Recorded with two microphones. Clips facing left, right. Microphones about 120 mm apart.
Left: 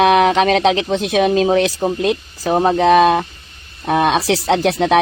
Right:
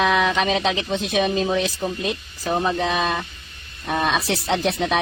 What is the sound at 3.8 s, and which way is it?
Speech, 75° left (ahead or behind).